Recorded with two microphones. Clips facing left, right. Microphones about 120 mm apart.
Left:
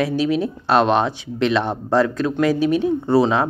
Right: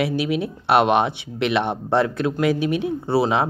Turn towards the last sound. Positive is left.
turn(degrees=-10)  # may be behind; listen again after turning